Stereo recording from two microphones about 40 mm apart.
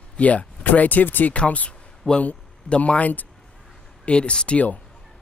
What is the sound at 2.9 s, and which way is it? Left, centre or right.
Speech, left.